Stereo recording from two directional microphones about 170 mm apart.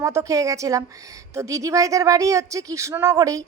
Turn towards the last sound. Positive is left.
turn(degrees=-20)  # may be behind; listen again after turning